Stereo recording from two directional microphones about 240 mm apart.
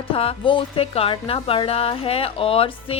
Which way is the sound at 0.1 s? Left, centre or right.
Left.